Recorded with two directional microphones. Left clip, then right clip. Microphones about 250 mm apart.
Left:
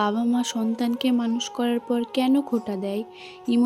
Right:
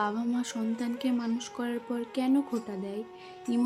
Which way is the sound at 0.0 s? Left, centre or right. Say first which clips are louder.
Left 7 dB; left.